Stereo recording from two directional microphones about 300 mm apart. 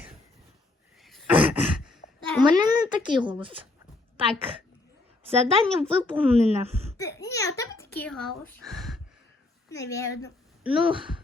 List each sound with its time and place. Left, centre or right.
1.0 s a sound: centre
2.4 s a woman's voice: centre
7.2 s a woman's voice: centre
10.6 s speech: centre